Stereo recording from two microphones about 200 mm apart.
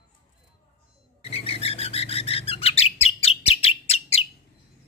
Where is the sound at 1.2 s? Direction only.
30° left (ahead or behind).